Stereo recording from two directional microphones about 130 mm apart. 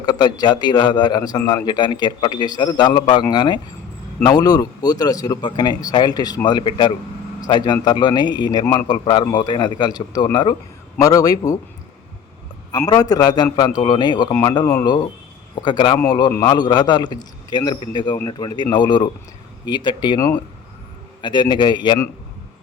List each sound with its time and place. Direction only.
0.0 s a man's voice: 35° left (ahead or behind)
12.7 s a man's voice: 25° left (ahead or behind)